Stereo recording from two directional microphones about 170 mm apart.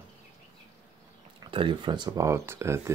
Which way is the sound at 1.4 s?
30° right (ahead or behind).